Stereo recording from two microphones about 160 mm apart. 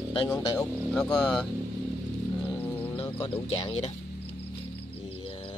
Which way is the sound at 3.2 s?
35° left (ahead or behind).